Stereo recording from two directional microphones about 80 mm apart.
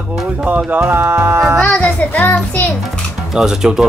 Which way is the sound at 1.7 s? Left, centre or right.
Left.